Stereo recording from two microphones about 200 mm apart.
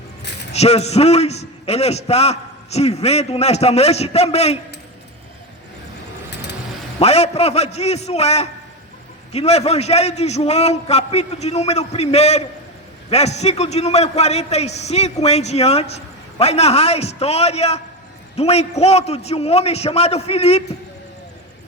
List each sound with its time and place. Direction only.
0.5 s a man's voice: 30° left (ahead or behind)
7.0 s a man's voice: 30° left (ahead or behind)